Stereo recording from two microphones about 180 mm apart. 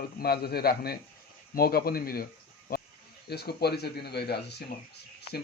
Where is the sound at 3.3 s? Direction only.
65° left (ahead or behind).